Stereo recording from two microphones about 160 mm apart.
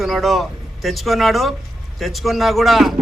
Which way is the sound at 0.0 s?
Centre (ahead or behind).